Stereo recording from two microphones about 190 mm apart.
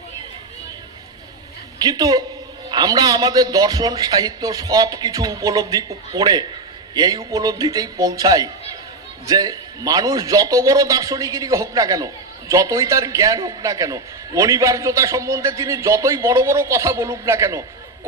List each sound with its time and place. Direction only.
1.8 s a man's voice: 20° right (ahead or behind)